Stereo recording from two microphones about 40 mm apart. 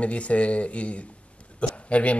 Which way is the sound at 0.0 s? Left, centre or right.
Left.